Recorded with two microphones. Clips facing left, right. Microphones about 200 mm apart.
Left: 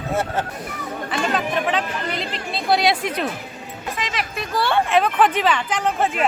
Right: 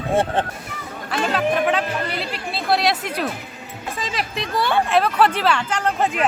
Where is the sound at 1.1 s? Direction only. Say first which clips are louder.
Right 3 dB; centre (ahead or behind).